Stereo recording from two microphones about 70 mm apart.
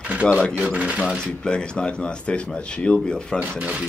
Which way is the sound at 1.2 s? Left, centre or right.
Centre.